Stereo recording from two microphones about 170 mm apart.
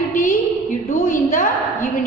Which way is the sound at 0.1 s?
50° left (ahead or behind).